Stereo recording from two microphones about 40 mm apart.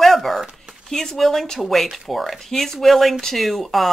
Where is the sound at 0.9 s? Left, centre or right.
Centre.